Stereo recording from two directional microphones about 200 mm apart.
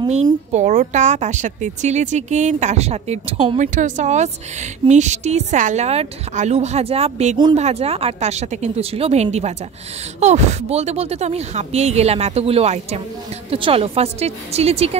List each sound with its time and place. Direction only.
0.1 s speech: 35° right (ahead or behind)